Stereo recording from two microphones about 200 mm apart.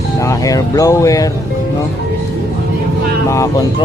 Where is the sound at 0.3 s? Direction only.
15° left (ahead or behind).